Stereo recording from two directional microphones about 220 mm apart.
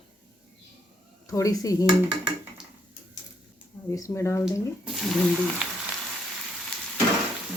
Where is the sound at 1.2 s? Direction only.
15° left (ahead or behind).